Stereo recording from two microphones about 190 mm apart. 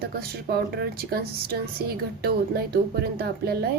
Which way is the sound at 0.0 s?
55° right (ahead or behind).